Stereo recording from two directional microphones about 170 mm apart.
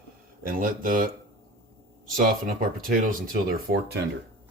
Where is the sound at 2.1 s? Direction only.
55° right (ahead or behind).